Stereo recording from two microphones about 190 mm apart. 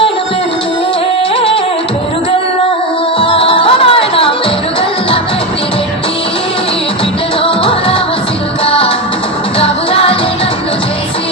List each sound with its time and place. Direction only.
3.2 s music: 30° left (ahead or behind)
7.4 s music: 30° left (ahead or behind)